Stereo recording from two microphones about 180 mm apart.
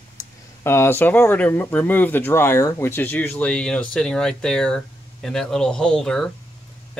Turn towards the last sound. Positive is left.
turn(degrees=5)  # may be behind; listen again after turning